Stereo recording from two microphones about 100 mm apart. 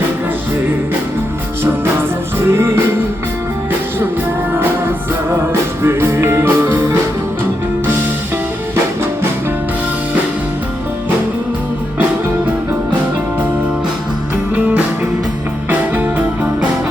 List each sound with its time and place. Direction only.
2.5 s music: 25° right (ahead or behind)
5.8 s music: 25° right (ahead or behind)
14.5 s music: 15° right (ahead or behind)